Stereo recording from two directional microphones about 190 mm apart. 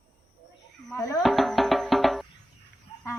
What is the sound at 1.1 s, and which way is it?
Music, centre (ahead or behind).